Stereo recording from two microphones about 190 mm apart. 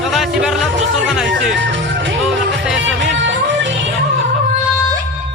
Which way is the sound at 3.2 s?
75° right (ahead or behind).